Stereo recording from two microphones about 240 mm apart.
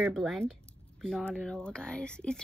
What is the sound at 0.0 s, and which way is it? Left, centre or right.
A woman's voice, centre.